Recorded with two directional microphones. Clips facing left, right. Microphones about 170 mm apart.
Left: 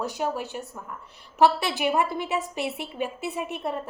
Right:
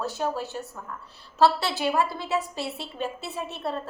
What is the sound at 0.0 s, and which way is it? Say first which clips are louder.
A woman's voice: even; 15° left (ahead or behind).